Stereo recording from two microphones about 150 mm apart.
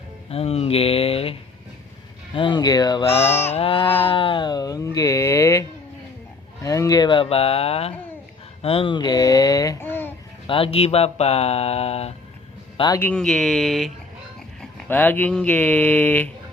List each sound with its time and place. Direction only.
0.3 s speech: 40° left (ahead or behind); by 3.1 s 25° left (ahead or behind)
3.1 s a sound: 40° left (ahead or behind)
4.0 s music: 35° left (ahead or behind); by 5.6 s 20° left (ahead or behind)
6.6 s speech: 20° left (ahead or behind)
10.4 s speech: 35° left (ahead or behind)
12.9 s speech: 15° left (ahead or behind)
13.1 s speech: centre (ahead or behind)
14.6 s speech: 15° left (ahead or behind)